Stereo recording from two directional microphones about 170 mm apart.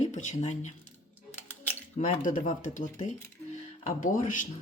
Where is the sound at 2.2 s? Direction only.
50° left (ahead or behind).